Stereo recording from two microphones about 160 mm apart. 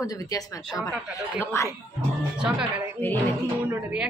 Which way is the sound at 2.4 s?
5° right (ahead or behind).